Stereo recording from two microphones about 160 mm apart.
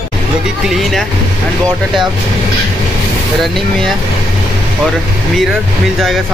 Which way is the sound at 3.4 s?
Centre (ahead or behind).